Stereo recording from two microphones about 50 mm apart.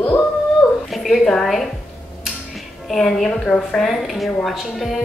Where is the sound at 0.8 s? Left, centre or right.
Centre.